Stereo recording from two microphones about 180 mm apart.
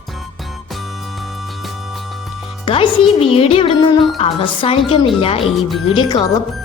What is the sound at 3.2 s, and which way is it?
Speech, 30° left (ahead or behind).